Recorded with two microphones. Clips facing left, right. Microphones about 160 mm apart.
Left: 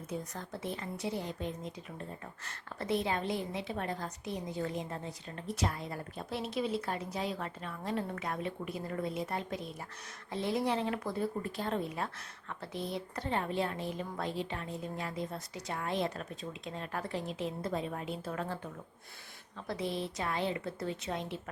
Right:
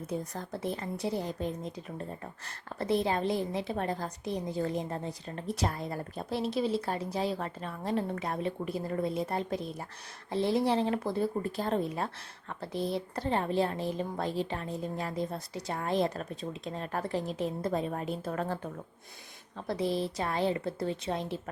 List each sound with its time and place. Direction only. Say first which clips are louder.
0.1 s speech: right 3 dB; 35° right (ahead or behind)